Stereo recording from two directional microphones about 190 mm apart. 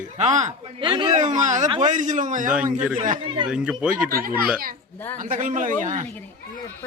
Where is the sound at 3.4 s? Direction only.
5° right (ahead or behind).